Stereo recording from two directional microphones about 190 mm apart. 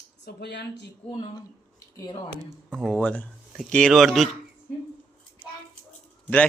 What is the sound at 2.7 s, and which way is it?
A man's voice, 5° left (ahead or behind).